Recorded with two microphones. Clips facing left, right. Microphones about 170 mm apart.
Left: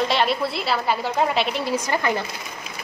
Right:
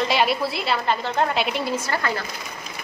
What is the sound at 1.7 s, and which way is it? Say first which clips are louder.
Speech: left 3 dB; 15° left (ahead or behind).